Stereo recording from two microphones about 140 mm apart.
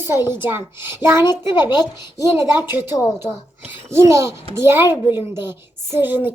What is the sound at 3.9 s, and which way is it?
A woman's voice, 20° right (ahead or behind).